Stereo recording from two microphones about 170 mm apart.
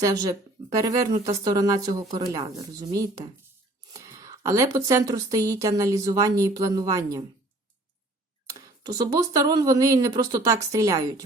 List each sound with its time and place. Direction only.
0.0 s speech: 20° right (ahead or behind)
8.4 s speech: 20° right (ahead or behind)